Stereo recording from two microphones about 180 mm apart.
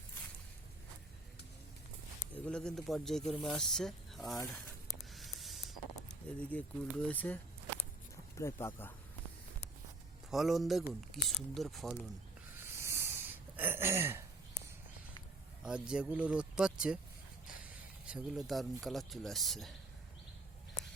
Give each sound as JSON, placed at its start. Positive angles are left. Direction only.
{"t": 2.3, "sound": "speech", "side_deg": 5}
{"t": 3.2, "sound": "speech", "side_deg": 25}
{"t": 3.5, "sound": "speech", "side_deg": 0}
{"t": 5.1, "sound": "a sound", "side_deg": 0}
{"t": 6.1, "sound": "speech", "side_deg": 10}
{"t": 7.8, "sound": "walk", "side_deg": 15}
{"t": 10.3, "sound": "speech", "side_deg": 0}
{"t": 12.5, "sound": "a sound", "side_deg": -15}
{"t": 15.6, "sound": "speech", "side_deg": -5}
{"t": 18.0, "sound": "speech", "side_deg": -5}